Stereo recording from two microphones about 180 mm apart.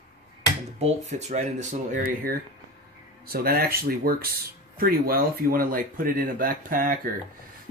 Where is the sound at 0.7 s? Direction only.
35° right (ahead or behind).